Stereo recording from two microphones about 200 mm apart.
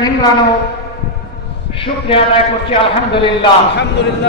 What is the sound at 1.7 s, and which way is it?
A man's voice, 25° left (ahead or behind).